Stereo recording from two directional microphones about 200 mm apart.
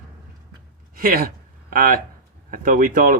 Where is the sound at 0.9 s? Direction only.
45° right (ahead or behind).